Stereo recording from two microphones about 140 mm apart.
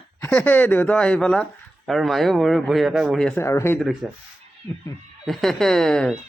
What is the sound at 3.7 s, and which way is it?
Speech, centre (ahead or behind).